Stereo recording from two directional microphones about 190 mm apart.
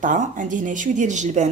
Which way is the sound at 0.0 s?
45° right (ahead or behind).